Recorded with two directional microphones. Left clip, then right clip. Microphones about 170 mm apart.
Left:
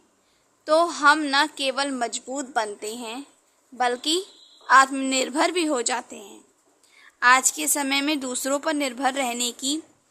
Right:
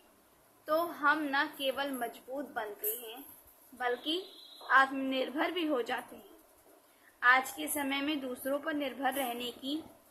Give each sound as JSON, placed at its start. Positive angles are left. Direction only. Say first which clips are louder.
{"t": 0.6, "sound": "a woman's voice", "louder": "left 12 dB", "side_deg": 90}
{"t": 7.2, "sound": "a woman's voice", "louder": "left 9 dB", "side_deg": 90}